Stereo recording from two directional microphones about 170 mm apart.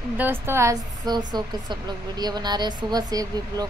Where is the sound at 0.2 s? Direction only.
15° right (ahead or behind).